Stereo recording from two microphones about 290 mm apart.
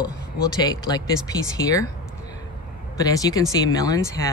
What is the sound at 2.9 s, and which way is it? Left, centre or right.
Speech, centre.